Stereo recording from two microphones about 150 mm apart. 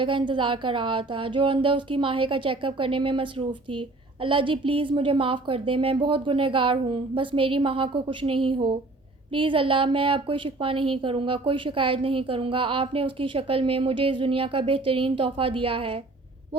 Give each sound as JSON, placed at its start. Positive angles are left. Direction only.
{"t": 0.0, "sound": "speech", "side_deg": -35}